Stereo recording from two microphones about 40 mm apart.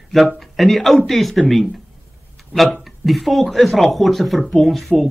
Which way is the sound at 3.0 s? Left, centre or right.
Centre.